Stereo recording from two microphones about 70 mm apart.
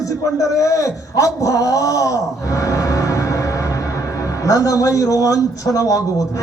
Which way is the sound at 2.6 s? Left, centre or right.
Left.